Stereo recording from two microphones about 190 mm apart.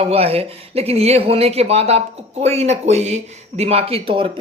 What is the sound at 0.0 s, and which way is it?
Speech, 30° right (ahead or behind).